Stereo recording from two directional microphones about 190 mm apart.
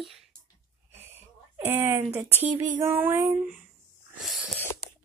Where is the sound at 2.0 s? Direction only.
15° right (ahead or behind).